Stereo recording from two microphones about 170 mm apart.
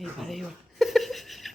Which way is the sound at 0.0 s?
Centre (ahead or behind).